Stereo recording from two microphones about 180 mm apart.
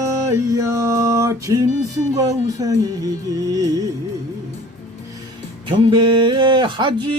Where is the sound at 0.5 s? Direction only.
15° right (ahead or behind).